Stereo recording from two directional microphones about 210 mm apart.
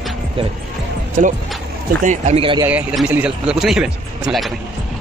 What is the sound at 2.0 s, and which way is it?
Speech, 35° right (ahead or behind).